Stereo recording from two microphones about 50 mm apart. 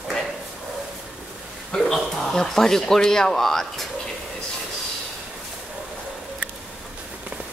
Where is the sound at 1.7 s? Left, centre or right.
Centre.